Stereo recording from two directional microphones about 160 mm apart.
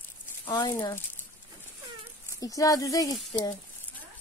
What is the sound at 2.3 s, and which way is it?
Speech, 20° left (ahead or behind).